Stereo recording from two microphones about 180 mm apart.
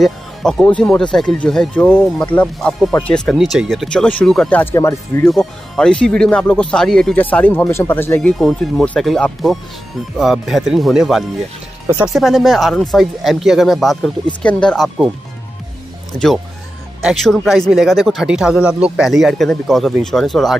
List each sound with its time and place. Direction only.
0.0 s speech: 5° left (ahead or behind)
5.3 s speech: 5° left (ahead or behind)
12.2 s speech: centre (ahead or behind)
16.1 s speech: 5° left (ahead or behind)